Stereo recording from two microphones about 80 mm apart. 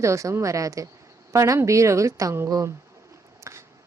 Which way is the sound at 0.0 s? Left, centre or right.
Right.